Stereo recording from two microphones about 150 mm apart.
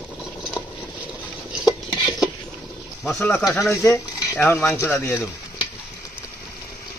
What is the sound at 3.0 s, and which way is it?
Speech, 5° left (ahead or behind).